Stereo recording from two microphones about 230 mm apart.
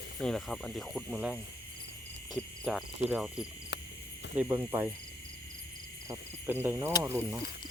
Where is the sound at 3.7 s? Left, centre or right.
Left.